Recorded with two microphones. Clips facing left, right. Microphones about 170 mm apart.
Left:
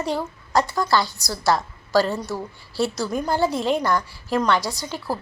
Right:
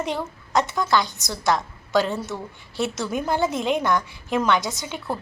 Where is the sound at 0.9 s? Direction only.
20° right (ahead or behind).